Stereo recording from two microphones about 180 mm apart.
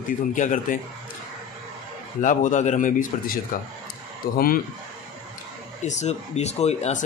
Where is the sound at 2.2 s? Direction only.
45° left (ahead or behind).